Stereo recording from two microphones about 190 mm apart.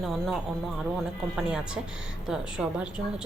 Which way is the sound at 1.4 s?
5° right (ahead or behind).